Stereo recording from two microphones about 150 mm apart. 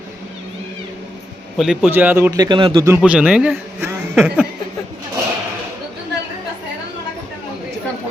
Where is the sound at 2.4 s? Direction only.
30° right (ahead or behind).